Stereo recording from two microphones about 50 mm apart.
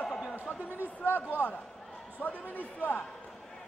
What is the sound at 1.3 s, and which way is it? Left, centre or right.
A man's voice, left.